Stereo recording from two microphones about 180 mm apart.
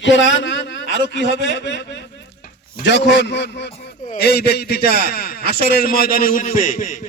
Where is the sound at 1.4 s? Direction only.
75° left (ahead or behind).